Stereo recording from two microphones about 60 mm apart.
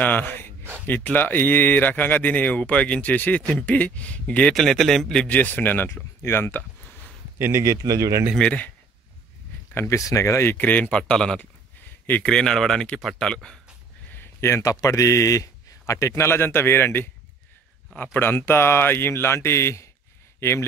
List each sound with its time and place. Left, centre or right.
0.0 s a sound: left
1.1 s speech: left
4.6 s speech: centre
5.2 s speech: left
7.3 s a man's voice: right
7.8 s speech: right
8.4 s speech: left
9.8 s speech: left
10.5 s speech: left
14.1 s a sound: left
14.6 s speech: left
15.9 s speech: left